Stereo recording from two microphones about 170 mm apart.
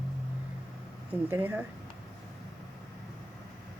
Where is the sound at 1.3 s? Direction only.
10° right (ahead or behind).